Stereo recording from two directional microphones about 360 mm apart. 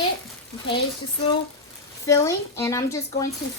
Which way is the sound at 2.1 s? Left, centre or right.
Centre.